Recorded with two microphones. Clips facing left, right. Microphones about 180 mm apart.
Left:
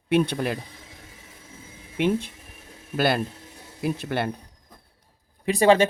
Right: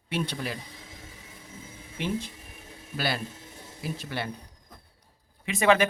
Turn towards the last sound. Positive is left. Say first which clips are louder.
# left 5 dB
turn(degrees=30)  # may be behind; listen again after turning